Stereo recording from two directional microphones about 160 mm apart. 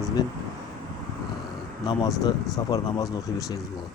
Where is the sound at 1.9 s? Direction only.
25° left (ahead or behind).